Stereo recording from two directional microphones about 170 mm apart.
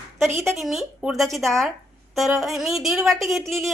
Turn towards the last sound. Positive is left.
turn(degrees=0)  # may be behind; listen again after turning